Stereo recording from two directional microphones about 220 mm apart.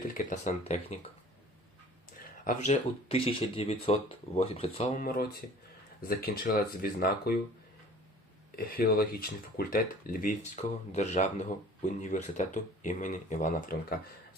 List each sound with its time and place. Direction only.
0.1 s speech: 35° left (ahead or behind)
2.4 s speech: 35° left (ahead or behind)
8.5 s speech: 40° left (ahead or behind)